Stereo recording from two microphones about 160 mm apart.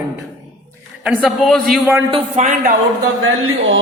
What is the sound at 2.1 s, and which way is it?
Speech, 50° right (ahead or behind).